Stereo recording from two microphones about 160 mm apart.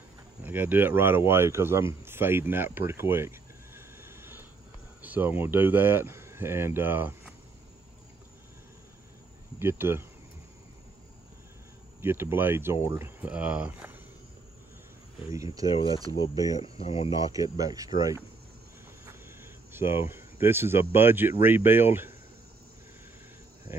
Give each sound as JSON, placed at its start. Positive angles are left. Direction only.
{"t": 0.4, "sound": "speech", "side_deg": -10}
{"t": 2.0, "sound": "a sound", "side_deg": -15}
{"t": 5.0, "sound": "speech", "side_deg": -10}
{"t": 9.6, "sound": "speech", "side_deg": -15}
{"t": 12.0, "sound": "speech", "side_deg": -15}
{"t": 15.2, "sound": "speech", "side_deg": -20}
{"t": 16.5, "sound": "speech", "side_deg": 35}
{"t": 17.2, "sound": "speech", "side_deg": -20}
{"t": 19.0, "sound": "speech", "side_deg": -15}